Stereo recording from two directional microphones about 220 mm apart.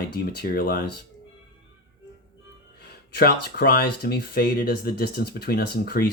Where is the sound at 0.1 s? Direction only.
45° left (ahead or behind).